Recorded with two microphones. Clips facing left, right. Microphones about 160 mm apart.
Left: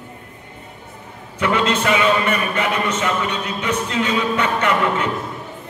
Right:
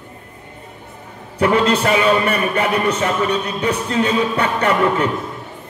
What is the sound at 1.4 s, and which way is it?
A man's voice, 35° right (ahead or behind).